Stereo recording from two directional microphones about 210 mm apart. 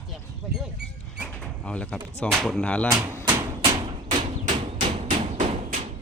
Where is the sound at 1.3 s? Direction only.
5° left (ahead or behind).